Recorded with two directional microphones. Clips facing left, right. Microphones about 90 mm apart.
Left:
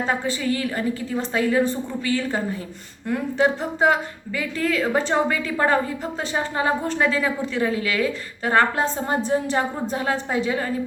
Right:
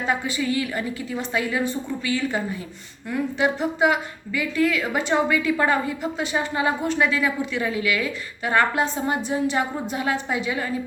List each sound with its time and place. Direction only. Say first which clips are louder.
0.1 s a woman's voice: right 3 dB; 40° left (ahead or behind)